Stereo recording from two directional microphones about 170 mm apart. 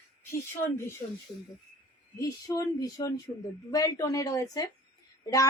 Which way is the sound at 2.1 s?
20° left (ahead or behind).